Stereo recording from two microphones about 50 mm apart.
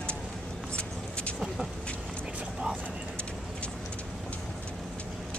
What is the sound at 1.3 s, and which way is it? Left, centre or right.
Vehicle, centre.